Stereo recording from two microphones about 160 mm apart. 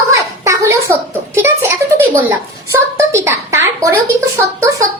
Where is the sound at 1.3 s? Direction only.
15° right (ahead or behind).